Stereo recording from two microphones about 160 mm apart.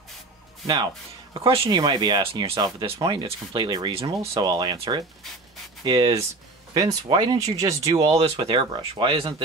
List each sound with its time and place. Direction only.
1.4 s speech: 35° right (ahead or behind)
8.1 s speech: 35° right (ahead or behind)